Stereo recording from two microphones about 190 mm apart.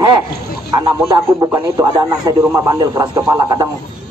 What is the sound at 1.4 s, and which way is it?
Speech, 15° right (ahead or behind).